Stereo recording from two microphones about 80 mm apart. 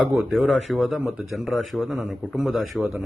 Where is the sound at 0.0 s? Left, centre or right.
Centre.